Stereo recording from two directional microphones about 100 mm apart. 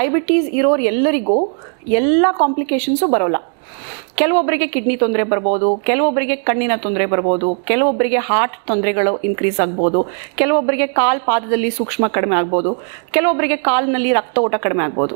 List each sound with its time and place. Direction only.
0.0 s a woman's voice: 20° right (ahead or behind)
5.9 s speech: 15° right (ahead or behind)
10.3 s a woman's voice: 15° right (ahead or behind)
13.1 s speech: 20° right (ahead or behind)